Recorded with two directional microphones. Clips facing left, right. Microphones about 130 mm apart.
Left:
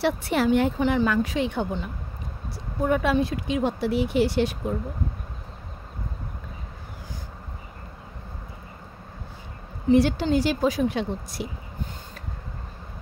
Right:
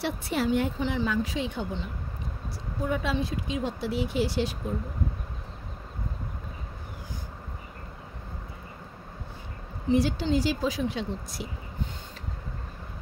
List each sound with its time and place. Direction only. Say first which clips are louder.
0.0 s a woman's voice: left 5 dB; 75° left (ahead or behind)
9.9 s a woman's voice: left 4 dB; 70° left (ahead or behind)